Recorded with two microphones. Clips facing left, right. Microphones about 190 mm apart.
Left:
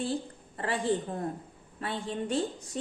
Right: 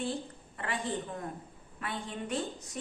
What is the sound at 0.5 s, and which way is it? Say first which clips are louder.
Speech: left 5 dB; 35° left (ahead or behind).